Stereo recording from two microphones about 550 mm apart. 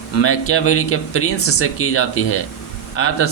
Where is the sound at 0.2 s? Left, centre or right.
Left.